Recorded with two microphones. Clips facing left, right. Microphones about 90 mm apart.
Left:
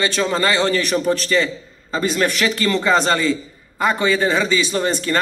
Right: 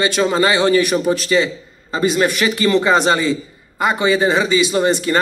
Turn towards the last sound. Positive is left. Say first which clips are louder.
# right 4 dB
turn(degrees=-15)  # may be behind; listen again after turning